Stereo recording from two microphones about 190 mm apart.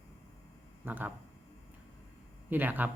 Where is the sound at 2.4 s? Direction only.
10° right (ahead or behind).